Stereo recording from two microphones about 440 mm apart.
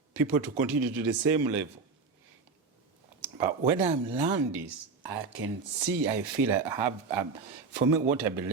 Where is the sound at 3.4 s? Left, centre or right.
Centre.